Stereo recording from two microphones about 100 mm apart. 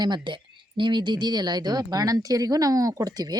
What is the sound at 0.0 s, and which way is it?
Speech, 50° right (ahead or behind).